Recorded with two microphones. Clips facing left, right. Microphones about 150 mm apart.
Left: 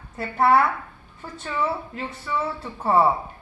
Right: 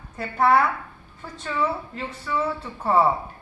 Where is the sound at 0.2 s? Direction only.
5° left (ahead or behind).